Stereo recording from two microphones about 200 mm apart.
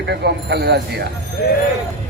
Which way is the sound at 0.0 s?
55° right (ahead or behind).